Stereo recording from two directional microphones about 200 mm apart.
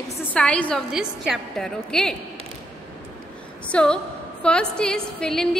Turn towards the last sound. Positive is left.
turn(degrees=5)  # may be behind; listen again after turning